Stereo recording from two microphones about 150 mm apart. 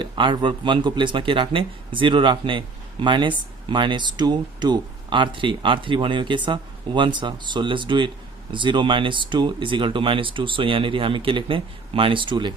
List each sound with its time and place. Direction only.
0.0 s speech: 35° right (ahead or behind)